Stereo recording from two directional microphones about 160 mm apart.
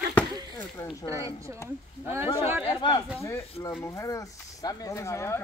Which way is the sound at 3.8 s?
20° left (ahead or behind).